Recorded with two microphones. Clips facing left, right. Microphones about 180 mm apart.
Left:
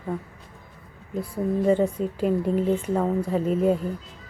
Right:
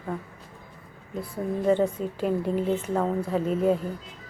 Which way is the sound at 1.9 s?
Centre (ahead or behind).